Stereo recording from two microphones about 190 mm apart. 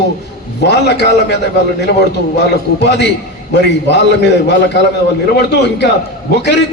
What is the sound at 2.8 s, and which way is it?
A man's voice, 65° left (ahead or behind).